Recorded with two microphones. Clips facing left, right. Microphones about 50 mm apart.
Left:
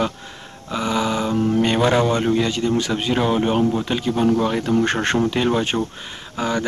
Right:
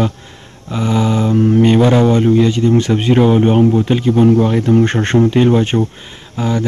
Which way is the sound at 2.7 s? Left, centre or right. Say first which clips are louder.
Right 8 dB; right.